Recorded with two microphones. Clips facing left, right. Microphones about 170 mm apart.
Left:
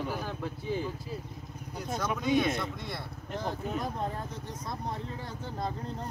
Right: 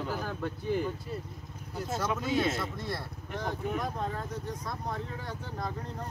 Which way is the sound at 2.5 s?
Centre (ahead or behind).